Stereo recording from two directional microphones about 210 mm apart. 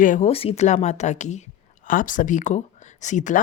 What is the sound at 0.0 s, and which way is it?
Speech, 35° left (ahead or behind).